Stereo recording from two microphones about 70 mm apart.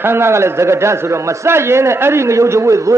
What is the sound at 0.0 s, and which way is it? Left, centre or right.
A man's voice, right.